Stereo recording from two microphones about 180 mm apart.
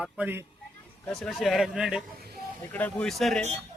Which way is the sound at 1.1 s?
Centre (ahead or behind).